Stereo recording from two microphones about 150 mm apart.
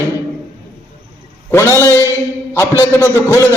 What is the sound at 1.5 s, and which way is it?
A man's voice, 15° left (ahead or behind).